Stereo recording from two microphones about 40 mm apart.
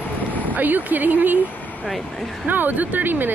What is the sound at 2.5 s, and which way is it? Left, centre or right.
Speech, right.